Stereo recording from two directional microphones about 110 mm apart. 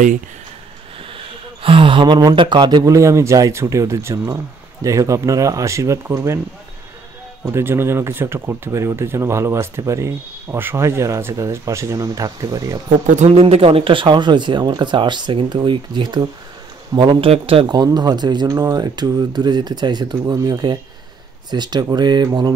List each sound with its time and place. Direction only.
1.1 s a sound: 55° right (ahead or behind)
2.3 s speech: 50° right (ahead or behind)
2.8 s speech: 30° right (ahead or behind)
7.4 s speech: 25° right (ahead or behind)
13.1 s speech: 80° right; by 17.3 s 45° right (ahead or behind)
17.3 s speech: 60° right (ahead or behind)
17.6 s speech: 40° right (ahead or behind)